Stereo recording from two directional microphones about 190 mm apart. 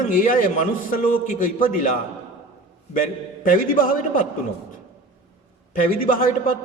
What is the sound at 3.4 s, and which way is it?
Speech, 45° left (ahead or behind).